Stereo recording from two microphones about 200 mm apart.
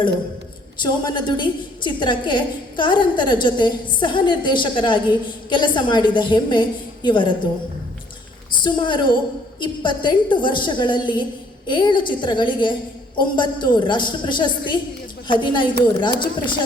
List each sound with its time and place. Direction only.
0.8 s a woman's voice: 25° left (ahead or behind)
8.6 s a woman's voice: 25° left (ahead or behind)